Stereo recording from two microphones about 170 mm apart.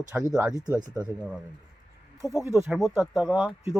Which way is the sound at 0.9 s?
5° right (ahead or behind).